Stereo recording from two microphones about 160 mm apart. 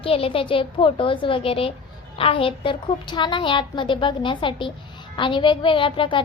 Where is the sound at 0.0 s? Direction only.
35° left (ahead or behind).